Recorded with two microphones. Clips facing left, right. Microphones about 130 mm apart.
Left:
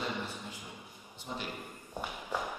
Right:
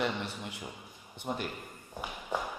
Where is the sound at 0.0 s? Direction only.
70° right (ahead or behind).